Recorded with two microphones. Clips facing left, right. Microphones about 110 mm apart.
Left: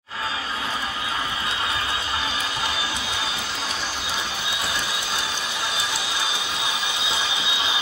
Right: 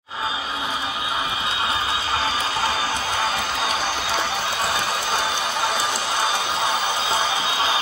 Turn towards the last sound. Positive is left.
turn(degrees=-40)  # may be behind; listen again after turning